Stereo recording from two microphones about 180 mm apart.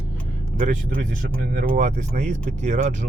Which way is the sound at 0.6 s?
40° right (ahead or behind).